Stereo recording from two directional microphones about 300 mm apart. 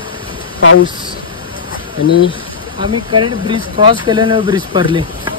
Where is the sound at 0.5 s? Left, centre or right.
Left.